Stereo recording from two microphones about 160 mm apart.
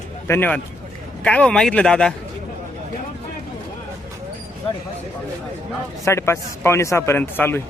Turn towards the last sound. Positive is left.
turn(degrees=15)  # may be behind; listen again after turning